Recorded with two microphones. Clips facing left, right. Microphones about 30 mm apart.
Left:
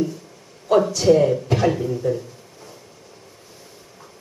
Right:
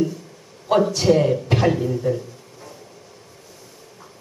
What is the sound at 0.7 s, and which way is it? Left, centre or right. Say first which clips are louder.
Speech: left 1 dB; right.